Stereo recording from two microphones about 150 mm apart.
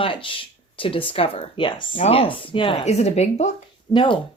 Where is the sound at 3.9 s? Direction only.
35° left (ahead or behind).